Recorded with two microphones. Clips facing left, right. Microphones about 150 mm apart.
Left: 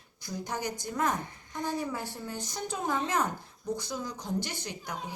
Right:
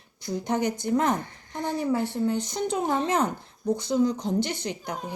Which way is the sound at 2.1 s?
20° right (ahead or behind).